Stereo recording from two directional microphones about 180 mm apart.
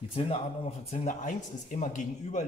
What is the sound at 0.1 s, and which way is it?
A man's voice, 35° left (ahead or behind).